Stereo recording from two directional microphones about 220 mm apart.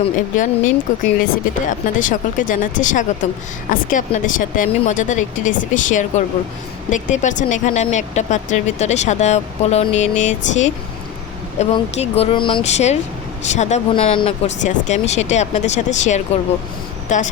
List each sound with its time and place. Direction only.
0.0 s speech: 35° left (ahead or behind)